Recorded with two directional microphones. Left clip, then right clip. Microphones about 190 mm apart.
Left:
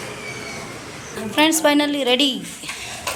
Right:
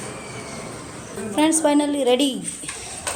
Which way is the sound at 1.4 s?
15° right (ahead or behind).